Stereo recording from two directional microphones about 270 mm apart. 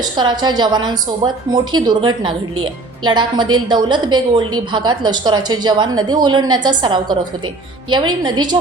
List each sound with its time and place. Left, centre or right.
0.0 s a woman's voice: centre